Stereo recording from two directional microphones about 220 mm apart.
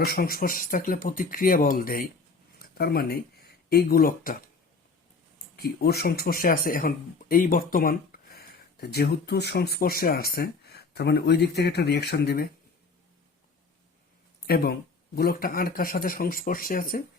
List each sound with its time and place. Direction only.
0.0 s speech: 45° left (ahead or behind)
5.5 s speech: 45° left (ahead or behind)
14.4 s speech: 45° left (ahead or behind)